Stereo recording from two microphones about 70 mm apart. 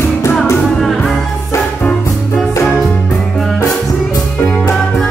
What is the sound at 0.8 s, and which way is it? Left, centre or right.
Music, centre.